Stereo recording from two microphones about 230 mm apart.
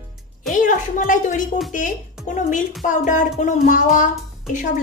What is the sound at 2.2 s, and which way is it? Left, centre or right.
Music, centre.